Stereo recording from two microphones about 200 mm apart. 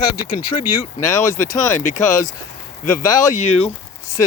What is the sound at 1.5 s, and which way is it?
Speech, 15° left (ahead or behind).